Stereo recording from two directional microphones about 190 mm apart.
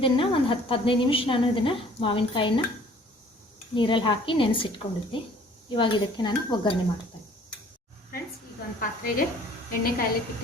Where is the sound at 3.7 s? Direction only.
25° left (ahead or behind).